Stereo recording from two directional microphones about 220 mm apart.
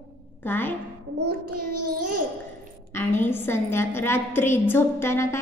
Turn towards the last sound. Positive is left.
turn(degrees=10)  # may be behind; listen again after turning